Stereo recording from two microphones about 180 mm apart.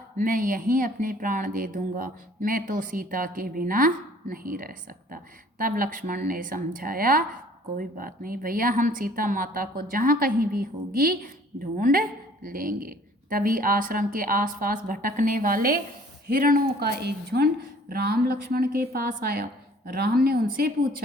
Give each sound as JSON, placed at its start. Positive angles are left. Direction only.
{"t": 0.2, "sound": "a woman's voice", "side_deg": -50}